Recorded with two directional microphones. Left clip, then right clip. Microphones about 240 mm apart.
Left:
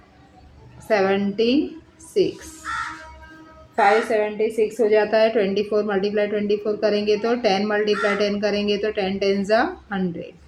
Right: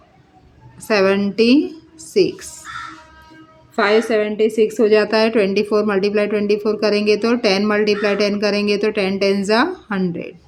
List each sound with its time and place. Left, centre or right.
0.9 s a woman's voice: right
2.7 s music: left
3.8 s a woman's voice: right